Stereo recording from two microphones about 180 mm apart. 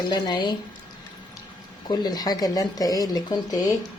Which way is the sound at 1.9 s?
20° left (ahead or behind).